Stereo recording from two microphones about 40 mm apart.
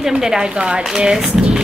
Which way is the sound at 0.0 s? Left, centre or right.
Centre.